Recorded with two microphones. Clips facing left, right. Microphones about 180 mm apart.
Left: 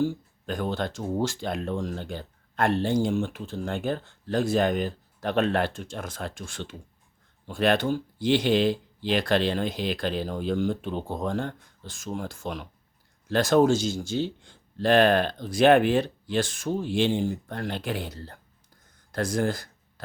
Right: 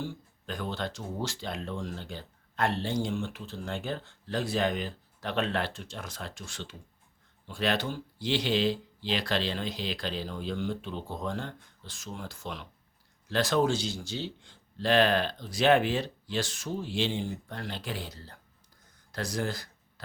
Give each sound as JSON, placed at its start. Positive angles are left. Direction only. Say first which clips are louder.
{"t": 0.0, "sound": "speech", "louder": "left 11 dB", "side_deg": 50}